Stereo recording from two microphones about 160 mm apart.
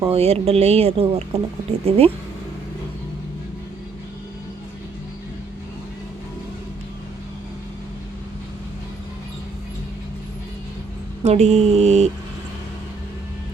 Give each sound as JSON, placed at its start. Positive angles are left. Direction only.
{"t": 0.1, "sound": "speech", "side_deg": -40}
{"t": 11.2, "sound": "mantra", "side_deg": -45}